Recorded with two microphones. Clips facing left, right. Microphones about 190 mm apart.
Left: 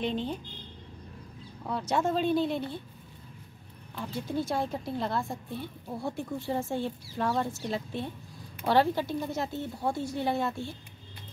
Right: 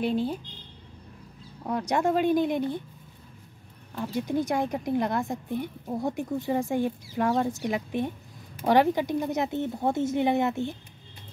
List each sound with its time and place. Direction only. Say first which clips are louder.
0.0 s speech: right 4 dB; 10° right (ahead or behind)
1.7 s speech: right 3 dB; 15° right (ahead or behind)
4.0 s a woman's voice: right 5 dB; 15° right (ahead or behind)